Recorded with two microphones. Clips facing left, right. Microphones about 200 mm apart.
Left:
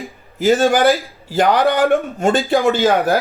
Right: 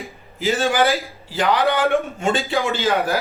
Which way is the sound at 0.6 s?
50° left (ahead or behind).